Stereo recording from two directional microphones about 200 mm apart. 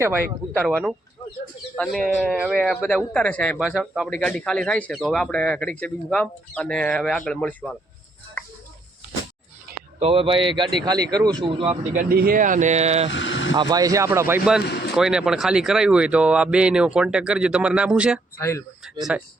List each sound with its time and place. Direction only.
0.5 s speech: 10° left (ahead or behind)
9.7 s a sound: 50° right (ahead or behind)
10.0 s a man's voice: 25° right (ahead or behind)
11.9 s speech: 45° right (ahead or behind)
13.1 s speech: 70° left (ahead or behind)
13.6 s speech: 20° right (ahead or behind)
18.3 s speech: 15° left (ahead or behind)